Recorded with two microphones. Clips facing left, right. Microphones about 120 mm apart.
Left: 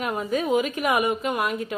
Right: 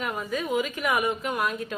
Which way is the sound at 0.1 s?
25° left (ahead or behind).